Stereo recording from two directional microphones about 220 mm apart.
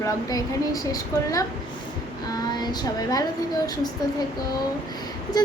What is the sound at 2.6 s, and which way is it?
Speech, 20° left (ahead or behind).